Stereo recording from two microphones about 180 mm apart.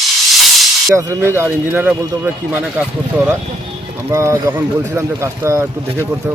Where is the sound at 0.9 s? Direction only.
15° right (ahead or behind).